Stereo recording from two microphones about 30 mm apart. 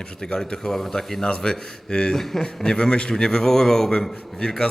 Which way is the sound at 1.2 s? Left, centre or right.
Left.